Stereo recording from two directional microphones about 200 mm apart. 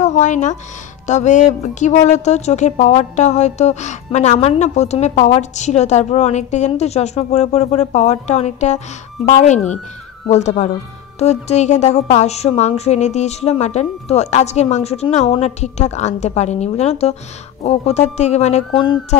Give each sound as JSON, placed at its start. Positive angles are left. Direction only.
{"t": 0.0, "sound": "speech", "side_deg": 35}